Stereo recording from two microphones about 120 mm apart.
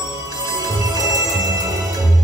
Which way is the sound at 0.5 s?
30° left (ahead or behind).